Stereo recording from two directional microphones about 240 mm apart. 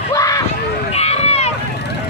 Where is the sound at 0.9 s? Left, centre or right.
Left.